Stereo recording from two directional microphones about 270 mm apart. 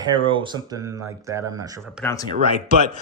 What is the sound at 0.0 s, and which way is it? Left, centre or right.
Speech, centre.